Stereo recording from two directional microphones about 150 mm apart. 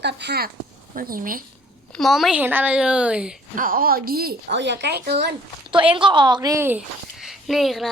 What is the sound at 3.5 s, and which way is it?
A woman's voice, 70° right (ahead or behind).